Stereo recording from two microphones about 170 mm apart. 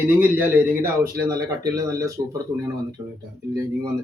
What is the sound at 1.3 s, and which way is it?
Speech, 20° right (ahead or behind).